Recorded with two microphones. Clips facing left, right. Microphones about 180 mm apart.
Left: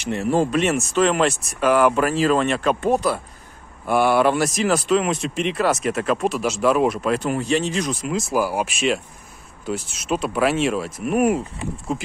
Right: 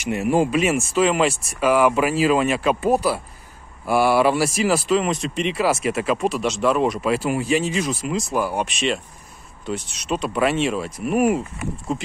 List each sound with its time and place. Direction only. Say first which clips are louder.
0.0 s speech: right 1 dB; 10° right (ahead or behind)